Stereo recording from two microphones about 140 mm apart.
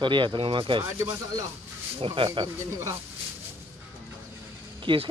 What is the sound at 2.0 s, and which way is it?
Speech, 40° right (ahead or behind).